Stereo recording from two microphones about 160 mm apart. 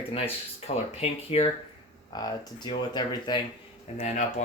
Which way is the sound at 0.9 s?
40° left (ahead or behind).